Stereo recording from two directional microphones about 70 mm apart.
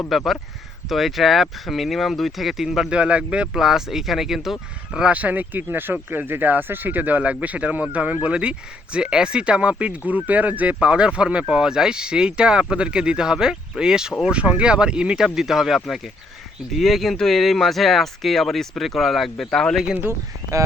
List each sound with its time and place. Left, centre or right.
0.1 s speech: centre
2.9 s speech: centre
4.9 s speech: centre